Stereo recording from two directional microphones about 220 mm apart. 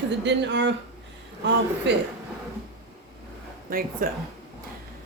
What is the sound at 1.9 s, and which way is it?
Speech, 55° right (ahead or behind).